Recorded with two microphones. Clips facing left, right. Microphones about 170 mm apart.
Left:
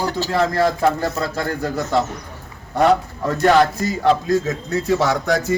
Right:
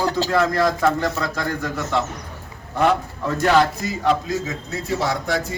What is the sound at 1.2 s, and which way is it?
A man's voice, 30° left (ahead or behind).